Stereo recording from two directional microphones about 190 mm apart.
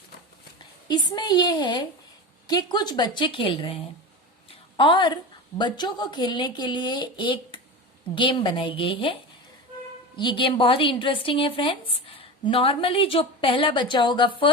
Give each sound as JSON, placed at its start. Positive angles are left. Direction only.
{"t": 0.9, "sound": "speech", "side_deg": 20}
{"t": 4.8, "sound": "speech", "side_deg": 25}
{"t": 10.2, "sound": "speech", "side_deg": 25}